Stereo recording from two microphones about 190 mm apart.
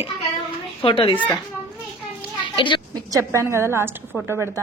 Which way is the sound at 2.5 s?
25° left (ahead or behind).